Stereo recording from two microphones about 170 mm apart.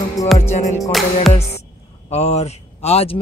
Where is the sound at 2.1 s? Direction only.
40° left (ahead or behind).